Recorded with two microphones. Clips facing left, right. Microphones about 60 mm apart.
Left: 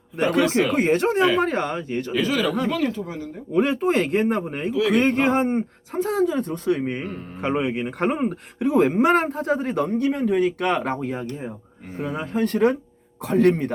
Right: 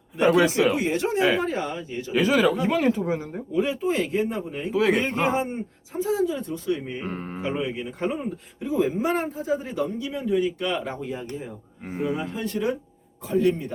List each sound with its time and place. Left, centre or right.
0.7 s speech: left
2.1 s speech: centre
3.5 s speech: left
4.7 s mantra: right
4.9 s speech: left
7.0 s mantra: right
7.4 s speech: left